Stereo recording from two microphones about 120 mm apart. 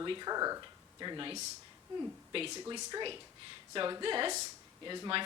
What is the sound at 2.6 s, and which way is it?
Speech, 35° right (ahead or behind).